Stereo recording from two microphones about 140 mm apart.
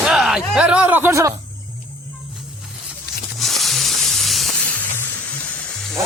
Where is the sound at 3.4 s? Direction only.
Centre (ahead or behind).